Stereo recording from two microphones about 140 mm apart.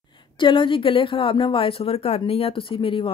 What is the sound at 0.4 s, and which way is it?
Speech, 35° left (ahead or behind).